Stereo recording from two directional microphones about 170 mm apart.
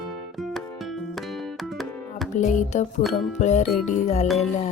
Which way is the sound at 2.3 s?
45° left (ahead or behind).